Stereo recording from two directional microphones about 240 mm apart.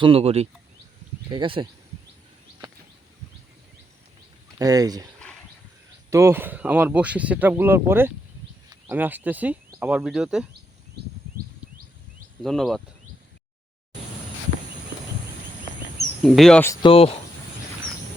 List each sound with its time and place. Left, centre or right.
0.0 s speech: right
4.5 s speech: centre
6.1 s speech: centre
12.4 s speech: centre
16.2 s speech: centre
16.8 s speech: left